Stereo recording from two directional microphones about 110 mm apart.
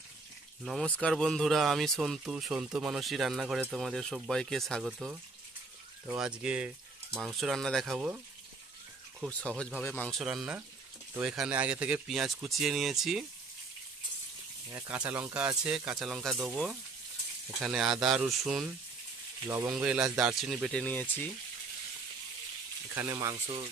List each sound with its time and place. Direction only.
0.8 s speech: 10° left (ahead or behind)
9.3 s speech: 10° left (ahead or behind)
10.1 s speech: 5° right (ahead or behind)
14.8 s speech: 10° right (ahead or behind)
19.4 s speech: 25° right (ahead or behind)
19.8 s speech: 10° right (ahead or behind)
20.7 s speech: 15° left (ahead or behind)
23.3 s speech: 60° right (ahead or behind)